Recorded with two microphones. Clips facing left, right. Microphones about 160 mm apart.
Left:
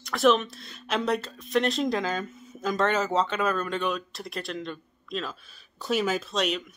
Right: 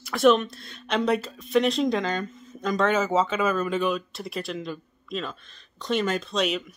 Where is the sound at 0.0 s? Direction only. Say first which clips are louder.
Right 3 dB; centre (ahead or behind).